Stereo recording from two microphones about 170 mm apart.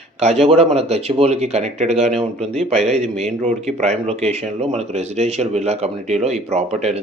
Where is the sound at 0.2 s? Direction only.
40° right (ahead or behind).